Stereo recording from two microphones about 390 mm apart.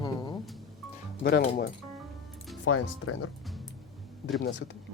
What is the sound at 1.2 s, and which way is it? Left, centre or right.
Speech, left.